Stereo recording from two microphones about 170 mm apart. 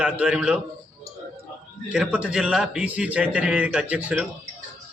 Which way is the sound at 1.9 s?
5° right (ahead or behind).